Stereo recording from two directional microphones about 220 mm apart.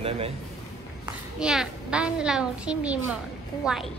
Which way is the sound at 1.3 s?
5° right (ahead or behind).